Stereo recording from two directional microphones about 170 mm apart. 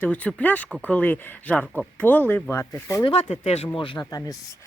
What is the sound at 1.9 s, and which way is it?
Speech, 10° left (ahead or behind).